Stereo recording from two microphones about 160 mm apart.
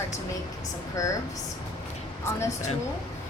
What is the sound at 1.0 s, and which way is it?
Speech, 20° left (ahead or behind).